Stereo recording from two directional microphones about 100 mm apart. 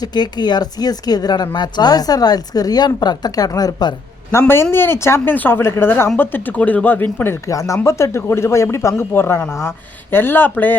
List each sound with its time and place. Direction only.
0.0 s speech: 45° left (ahead or behind)
4.3 s speech: 25° left (ahead or behind)
7.4 s speech: 30° left (ahead or behind)